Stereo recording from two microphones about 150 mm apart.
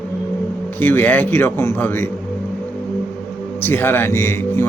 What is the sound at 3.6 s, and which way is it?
Speech, 15° left (ahead or behind).